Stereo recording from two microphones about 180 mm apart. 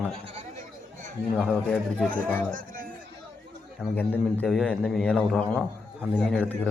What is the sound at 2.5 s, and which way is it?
Music, 50° right (ahead or behind).